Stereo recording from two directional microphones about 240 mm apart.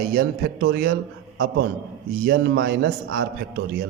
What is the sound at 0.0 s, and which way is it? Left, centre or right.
A man's voice, right.